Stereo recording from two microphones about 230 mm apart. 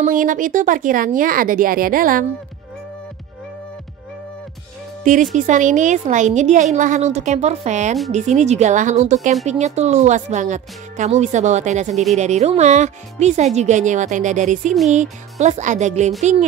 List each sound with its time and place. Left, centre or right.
0.0 s a woman's voice: right
5.0 s a woman's voice: right